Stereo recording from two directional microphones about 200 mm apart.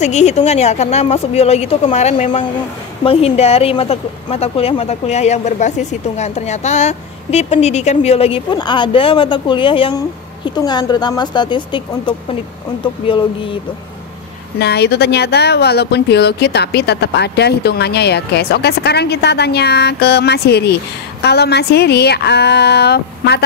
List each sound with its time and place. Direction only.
0.0 s speech: 35° left (ahead or behind)
14.6 s speech: 55° left (ahead or behind)